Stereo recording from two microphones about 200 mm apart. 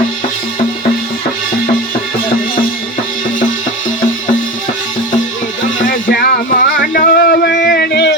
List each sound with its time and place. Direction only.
5.8 s music: 45° left (ahead or behind)